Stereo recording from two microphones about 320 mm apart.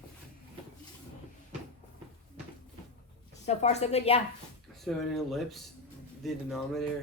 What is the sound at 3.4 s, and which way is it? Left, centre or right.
Speech, left.